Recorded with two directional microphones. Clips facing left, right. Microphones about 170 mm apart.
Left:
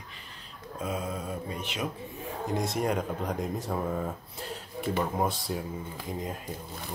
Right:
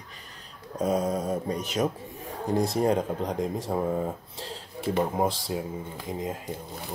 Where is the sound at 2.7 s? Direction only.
30° right (ahead or behind).